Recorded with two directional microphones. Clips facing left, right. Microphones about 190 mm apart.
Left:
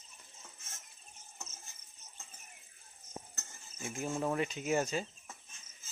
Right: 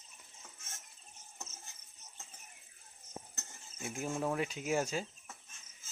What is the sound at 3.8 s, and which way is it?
Speech, centre (ahead or behind).